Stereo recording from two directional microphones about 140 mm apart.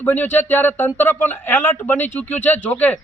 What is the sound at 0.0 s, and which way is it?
Speech, 15° left (ahead or behind).